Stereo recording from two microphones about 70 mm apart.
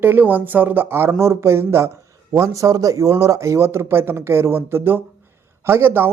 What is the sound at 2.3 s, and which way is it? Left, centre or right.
A man's voice, right.